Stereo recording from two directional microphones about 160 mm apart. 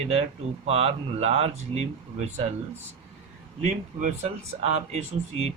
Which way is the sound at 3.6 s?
45° right (ahead or behind).